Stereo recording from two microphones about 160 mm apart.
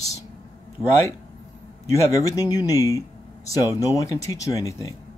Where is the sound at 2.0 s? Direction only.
20° left (ahead or behind).